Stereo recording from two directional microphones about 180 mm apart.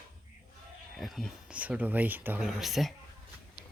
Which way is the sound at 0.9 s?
Centre (ahead or behind).